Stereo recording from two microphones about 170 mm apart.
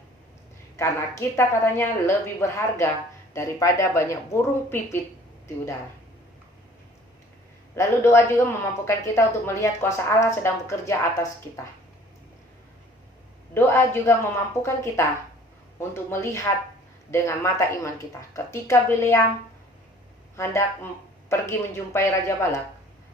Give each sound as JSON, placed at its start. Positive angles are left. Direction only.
{"t": 0.8, "sound": "a woman's voice", "side_deg": 15}
{"t": 7.8, "sound": "a woman's voice", "side_deg": 15}
{"t": 13.5, "sound": "a woman's voice", "side_deg": 15}
{"t": 20.3, "sound": "a woman's voice", "side_deg": 15}